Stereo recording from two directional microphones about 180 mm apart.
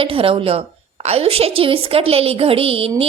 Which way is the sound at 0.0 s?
30° right (ahead or behind).